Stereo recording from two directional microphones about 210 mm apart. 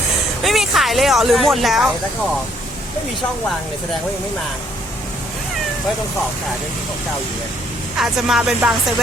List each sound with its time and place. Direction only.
0.4 s speech: centre (ahead or behind)
7.9 s music: centre (ahead or behind)